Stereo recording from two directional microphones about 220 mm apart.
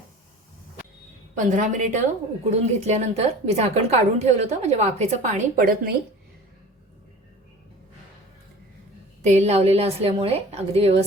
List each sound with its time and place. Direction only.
1.5 s a woman's voice: 35° right (ahead or behind)
9.2 s a woman's voice: 30° right (ahead or behind)